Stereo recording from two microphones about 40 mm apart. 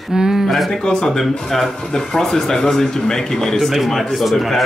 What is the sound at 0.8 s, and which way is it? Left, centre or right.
Speech, centre.